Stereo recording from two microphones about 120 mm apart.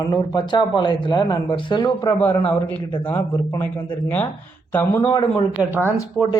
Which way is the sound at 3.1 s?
15° left (ahead or behind).